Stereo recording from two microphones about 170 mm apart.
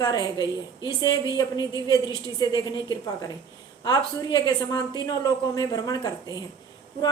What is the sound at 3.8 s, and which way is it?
Speech, 25° left (ahead or behind).